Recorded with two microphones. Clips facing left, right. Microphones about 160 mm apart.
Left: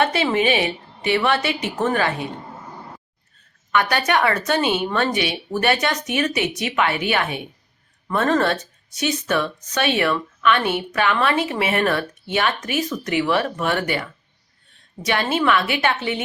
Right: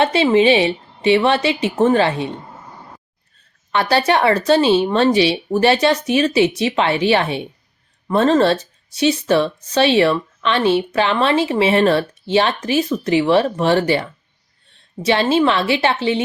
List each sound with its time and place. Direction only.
0.0 s a woman's voice: 25° right (ahead or behind)
3.7 s a woman's voice: 30° right (ahead or behind)